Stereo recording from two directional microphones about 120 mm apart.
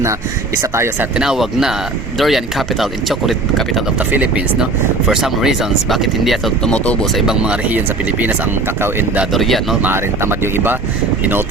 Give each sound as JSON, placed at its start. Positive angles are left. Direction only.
{"t": 0.6, "sound": "speech", "side_deg": -20}
{"t": 1.1, "sound": "speech", "side_deg": -5}
{"t": 4.1, "sound": "speech", "side_deg": -10}
{"t": 6.7, "sound": "speech", "side_deg": 10}
{"t": 7.2, "sound": "speech", "side_deg": -5}
{"t": 8.8, "sound": "speech", "side_deg": -15}
{"t": 9.3, "sound": "speech", "side_deg": 0}
{"t": 9.8, "sound": "speech", "side_deg": -20}